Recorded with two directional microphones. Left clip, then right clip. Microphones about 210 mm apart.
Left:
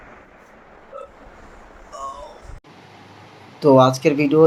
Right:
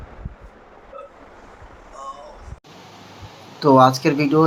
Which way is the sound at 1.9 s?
30° left (ahead or behind).